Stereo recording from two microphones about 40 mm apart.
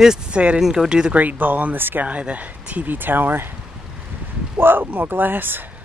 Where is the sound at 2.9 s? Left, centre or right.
Right.